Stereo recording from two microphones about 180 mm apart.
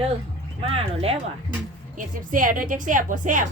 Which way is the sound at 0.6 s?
30° right (ahead or behind).